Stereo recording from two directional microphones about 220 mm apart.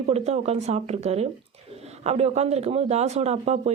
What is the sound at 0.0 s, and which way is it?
A woman's voice, 30° right (ahead or behind).